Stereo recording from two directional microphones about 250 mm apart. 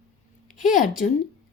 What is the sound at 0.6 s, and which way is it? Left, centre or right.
Speech, left.